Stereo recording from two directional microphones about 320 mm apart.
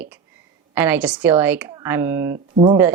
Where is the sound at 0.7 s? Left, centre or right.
Centre.